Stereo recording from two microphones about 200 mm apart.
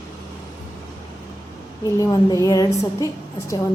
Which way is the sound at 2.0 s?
15° left (ahead or behind).